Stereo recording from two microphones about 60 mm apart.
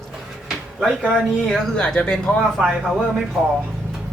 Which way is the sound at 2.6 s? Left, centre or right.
Centre.